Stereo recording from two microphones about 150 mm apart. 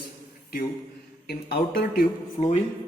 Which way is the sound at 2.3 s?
50° left (ahead or behind).